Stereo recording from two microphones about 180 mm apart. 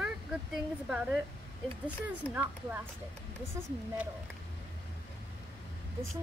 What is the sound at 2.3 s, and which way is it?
Speech, 10° right (ahead or behind).